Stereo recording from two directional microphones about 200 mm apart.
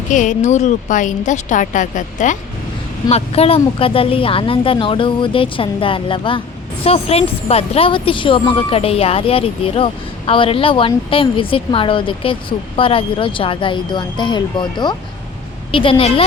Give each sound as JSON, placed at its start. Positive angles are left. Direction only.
{"t": 0.1, "sound": "a woman's voice", "side_deg": 40}